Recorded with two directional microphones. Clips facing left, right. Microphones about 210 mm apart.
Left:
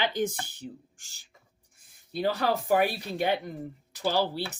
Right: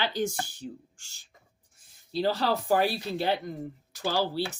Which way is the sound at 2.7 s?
15° left (ahead or behind).